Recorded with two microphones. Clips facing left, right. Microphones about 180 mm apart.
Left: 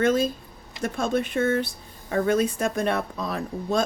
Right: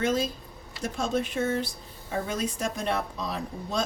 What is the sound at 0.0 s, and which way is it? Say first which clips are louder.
A woman's voice: left 5 dB; 55° left (ahead or behind).